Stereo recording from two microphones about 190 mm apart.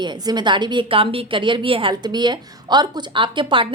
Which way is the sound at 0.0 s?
20° right (ahead or behind).